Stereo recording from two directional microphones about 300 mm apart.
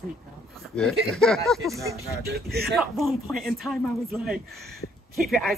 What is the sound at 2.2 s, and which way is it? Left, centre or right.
Speech, right.